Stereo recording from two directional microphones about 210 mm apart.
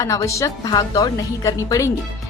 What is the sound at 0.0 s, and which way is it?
A woman's voice, 15° left (ahead or behind).